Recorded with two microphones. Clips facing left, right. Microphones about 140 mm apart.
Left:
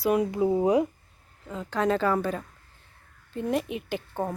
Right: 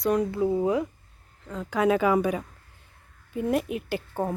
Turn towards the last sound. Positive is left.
turn(degrees=-5)  # may be behind; listen again after turning